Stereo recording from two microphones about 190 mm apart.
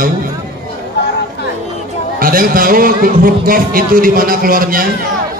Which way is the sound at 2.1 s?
50° right (ahead or behind).